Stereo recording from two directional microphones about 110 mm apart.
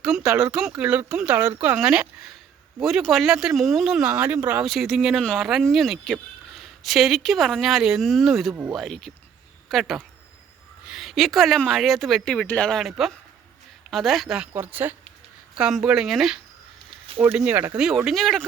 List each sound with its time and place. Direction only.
0.0 s speech: 5° right (ahead or behind)
4.6 s speech: centre (ahead or behind)
14.5 s speech: 15° right (ahead or behind); by 18.4 s centre (ahead or behind)